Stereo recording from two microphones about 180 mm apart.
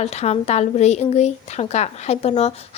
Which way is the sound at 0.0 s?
35° left (ahead or behind).